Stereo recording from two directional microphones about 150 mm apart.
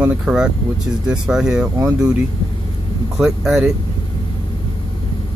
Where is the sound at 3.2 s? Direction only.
Centre (ahead or behind).